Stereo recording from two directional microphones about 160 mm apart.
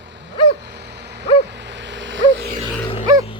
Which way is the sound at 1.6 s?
90° right.